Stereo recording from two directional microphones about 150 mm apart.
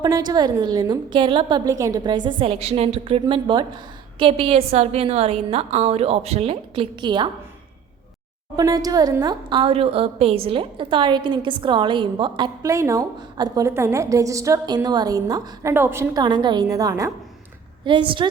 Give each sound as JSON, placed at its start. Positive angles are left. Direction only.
{"t": 0.0, "sound": "a woman's voice", "side_deg": -30}
{"t": 8.5, "sound": "a woman's voice", "side_deg": -25}
{"t": 12.6, "sound": "a woman's voice", "side_deg": -20}
{"t": 16.2, "sound": "a woman's voice", "side_deg": -30}
{"t": 17.8, "sound": "a woman's voice", "side_deg": -35}